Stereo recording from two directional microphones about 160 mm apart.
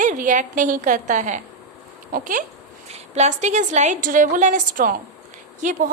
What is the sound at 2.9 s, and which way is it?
Speech, 45° right (ahead or behind).